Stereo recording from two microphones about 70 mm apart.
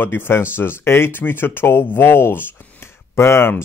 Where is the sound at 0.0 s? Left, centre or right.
Left.